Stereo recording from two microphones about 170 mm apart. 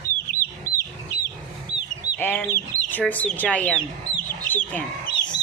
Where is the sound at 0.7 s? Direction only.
55° left (ahead or behind).